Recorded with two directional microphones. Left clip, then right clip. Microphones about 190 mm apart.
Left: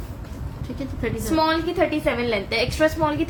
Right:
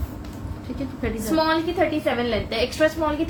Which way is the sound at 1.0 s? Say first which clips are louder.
Left 1 dB; 30° left (ahead or behind).